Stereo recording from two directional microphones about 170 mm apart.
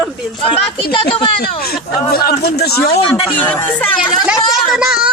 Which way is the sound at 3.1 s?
10° left (ahead or behind).